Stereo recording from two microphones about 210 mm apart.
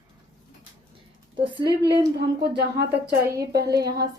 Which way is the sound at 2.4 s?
55° right (ahead or behind).